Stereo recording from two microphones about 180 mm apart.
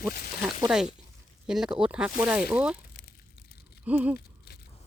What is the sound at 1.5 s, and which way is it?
Speech, 5° right (ahead or behind).